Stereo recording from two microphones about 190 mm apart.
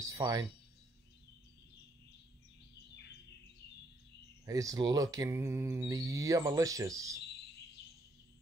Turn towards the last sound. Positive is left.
turn(degrees=-15)  # may be behind; listen again after turning